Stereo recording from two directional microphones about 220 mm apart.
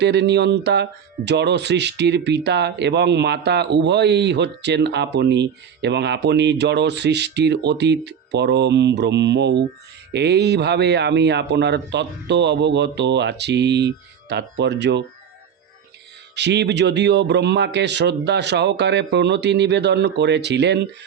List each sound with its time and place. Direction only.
0.0 s speech: 50° right (ahead or behind)
16.3 s speech: 50° right (ahead or behind)